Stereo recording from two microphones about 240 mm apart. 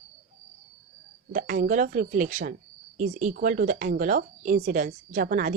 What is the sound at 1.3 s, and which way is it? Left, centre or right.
Speech, right.